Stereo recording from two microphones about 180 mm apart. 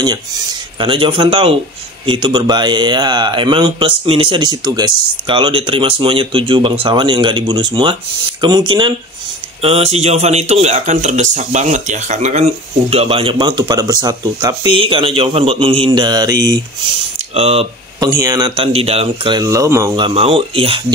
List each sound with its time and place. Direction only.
0.0 s a man's voice: 25° right (ahead or behind)
17.3 s speech: 35° right (ahead or behind)
18.0 s a man's voice: 20° right (ahead or behind)
20.0 s speech: 30° right (ahead or behind)